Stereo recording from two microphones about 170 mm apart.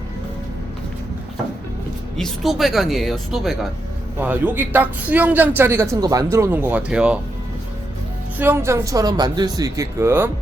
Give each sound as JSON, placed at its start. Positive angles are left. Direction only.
{"t": 2.1, "sound": "a man's voice", "side_deg": 0}
{"t": 8.4, "sound": "speech", "side_deg": -15}